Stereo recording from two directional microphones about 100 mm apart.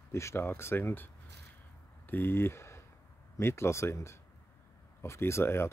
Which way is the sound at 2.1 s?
20° left (ahead or behind).